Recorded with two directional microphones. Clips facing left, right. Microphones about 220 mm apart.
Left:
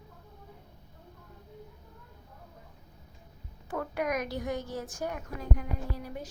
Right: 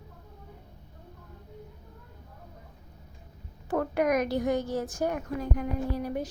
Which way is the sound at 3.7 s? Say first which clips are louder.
Right 6 dB; 45° right (ahead or behind).